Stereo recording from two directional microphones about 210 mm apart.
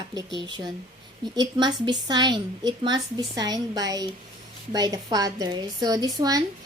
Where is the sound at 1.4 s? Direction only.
20° right (ahead or behind).